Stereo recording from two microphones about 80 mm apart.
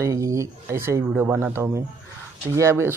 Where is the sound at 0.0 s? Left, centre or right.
Right.